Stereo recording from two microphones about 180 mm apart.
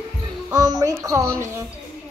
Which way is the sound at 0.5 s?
20° right (ahead or behind).